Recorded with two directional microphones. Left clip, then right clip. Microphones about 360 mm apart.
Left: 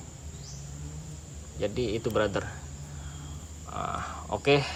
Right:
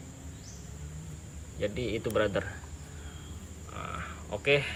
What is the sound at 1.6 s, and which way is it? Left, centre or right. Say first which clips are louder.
Speech: left 3 dB; centre.